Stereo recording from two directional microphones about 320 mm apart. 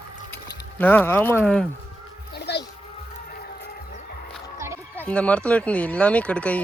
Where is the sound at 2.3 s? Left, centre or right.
Left.